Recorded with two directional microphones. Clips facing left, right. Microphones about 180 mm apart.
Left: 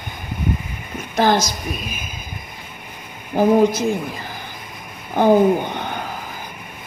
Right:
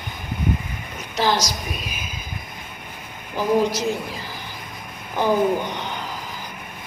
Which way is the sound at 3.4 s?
55° left (ahead or behind).